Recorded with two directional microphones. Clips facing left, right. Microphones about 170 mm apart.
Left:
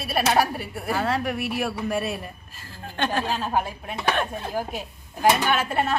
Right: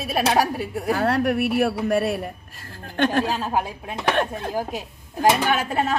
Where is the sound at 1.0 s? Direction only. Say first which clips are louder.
Right 5 dB; 65° right (ahead or behind).